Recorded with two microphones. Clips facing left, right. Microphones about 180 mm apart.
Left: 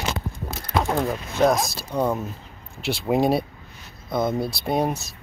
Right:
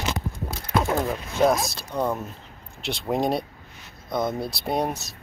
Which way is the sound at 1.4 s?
Centre (ahead or behind).